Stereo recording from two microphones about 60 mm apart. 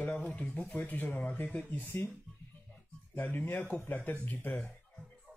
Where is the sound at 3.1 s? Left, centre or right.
Left.